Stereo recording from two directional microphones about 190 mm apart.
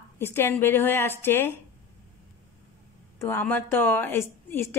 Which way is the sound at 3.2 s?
10° left (ahead or behind).